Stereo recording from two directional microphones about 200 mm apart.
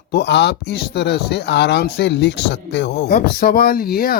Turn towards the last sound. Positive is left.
turn(degrees=50)  # may be behind; listen again after turning